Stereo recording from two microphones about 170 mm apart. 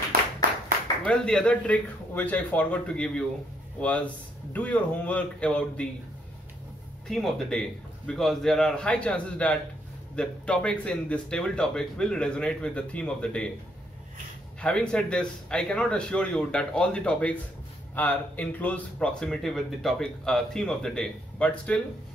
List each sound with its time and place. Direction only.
1.0 s speech: 5° left (ahead or behind)
4.6 s a man's voice: 10° left (ahead or behind)
7.1 s speech: centre (ahead or behind)
14.6 s speech: 5° left (ahead or behind)